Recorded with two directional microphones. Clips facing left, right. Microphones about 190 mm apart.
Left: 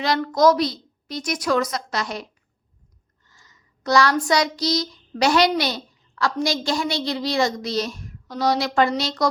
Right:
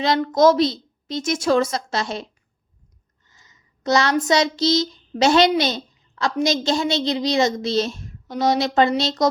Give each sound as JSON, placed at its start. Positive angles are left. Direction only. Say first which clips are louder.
{"t": 0.2, "sound": "a woman's voice", "louder": "right 2 dB", "side_deg": -25}